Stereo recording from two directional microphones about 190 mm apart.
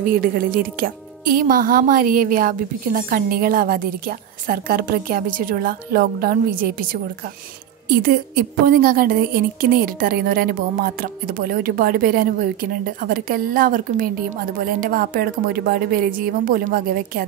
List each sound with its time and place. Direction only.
0.0 s a woman's voice: 50° right (ahead or behind)